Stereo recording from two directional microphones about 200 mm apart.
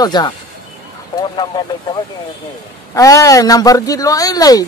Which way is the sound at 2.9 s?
15° left (ahead or behind).